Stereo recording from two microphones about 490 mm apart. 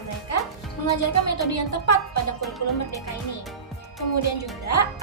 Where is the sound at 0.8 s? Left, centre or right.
Left.